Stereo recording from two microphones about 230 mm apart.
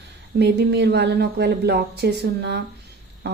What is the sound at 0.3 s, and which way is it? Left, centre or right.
A woman's voice, right.